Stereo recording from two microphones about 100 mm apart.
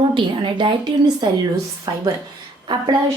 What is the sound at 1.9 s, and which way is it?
Speech, 45° right (ahead or behind).